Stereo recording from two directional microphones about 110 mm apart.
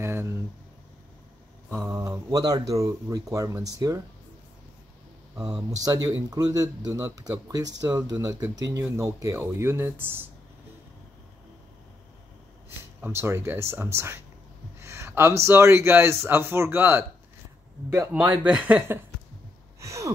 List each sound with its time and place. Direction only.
0.0 s a sound: 25° right (ahead or behind)
1.8 s speech: 30° right (ahead or behind)
5.8 s speech: 35° right (ahead or behind)
12.6 s speech: 20° right (ahead or behind)
18.1 s speech: 15° right (ahead or behind)
19.8 s a sound: 25° right (ahead or behind)